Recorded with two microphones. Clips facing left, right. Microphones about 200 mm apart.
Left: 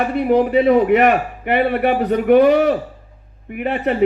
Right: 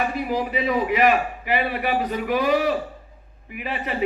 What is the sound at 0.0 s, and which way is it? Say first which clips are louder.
Speech: left 9 dB; 60° left (ahead or behind).